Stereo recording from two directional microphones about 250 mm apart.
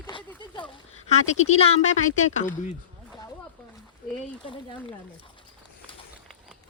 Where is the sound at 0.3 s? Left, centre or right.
Centre.